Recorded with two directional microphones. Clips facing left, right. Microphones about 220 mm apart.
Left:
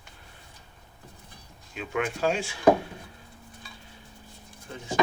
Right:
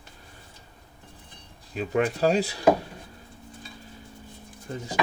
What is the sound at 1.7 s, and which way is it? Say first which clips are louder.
Speech: right 5 dB; 35° right (ahead or behind).